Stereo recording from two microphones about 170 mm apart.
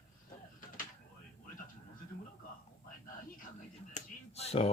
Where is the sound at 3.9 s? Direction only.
40° left (ahead or behind).